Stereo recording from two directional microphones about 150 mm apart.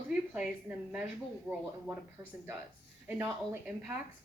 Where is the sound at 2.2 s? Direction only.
15° right (ahead or behind).